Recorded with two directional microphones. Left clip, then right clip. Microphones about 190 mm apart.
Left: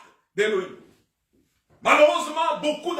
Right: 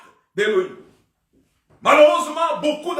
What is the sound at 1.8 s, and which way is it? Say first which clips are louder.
Speech: right 4 dB; 15° right (ahead or behind).